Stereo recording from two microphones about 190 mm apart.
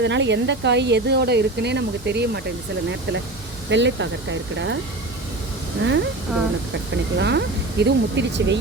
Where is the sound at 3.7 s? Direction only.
70° right (ahead or behind).